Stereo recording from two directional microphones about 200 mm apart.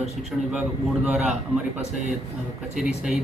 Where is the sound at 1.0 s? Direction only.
5° right (ahead or behind).